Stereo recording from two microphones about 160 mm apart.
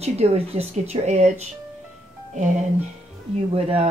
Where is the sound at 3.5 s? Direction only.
35° right (ahead or behind).